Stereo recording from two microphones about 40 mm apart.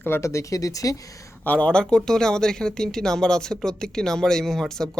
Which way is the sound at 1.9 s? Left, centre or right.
Centre.